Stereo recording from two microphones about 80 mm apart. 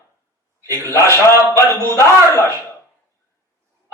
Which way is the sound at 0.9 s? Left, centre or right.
Left.